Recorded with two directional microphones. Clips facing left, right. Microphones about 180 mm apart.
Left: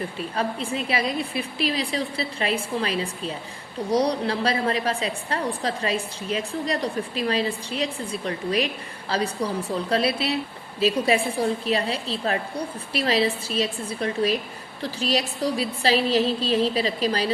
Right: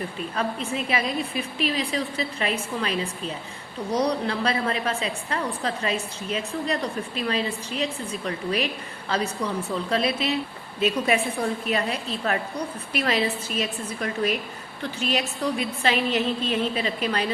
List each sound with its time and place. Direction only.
0.3 s a woman's voice: 30° left (ahead or behind)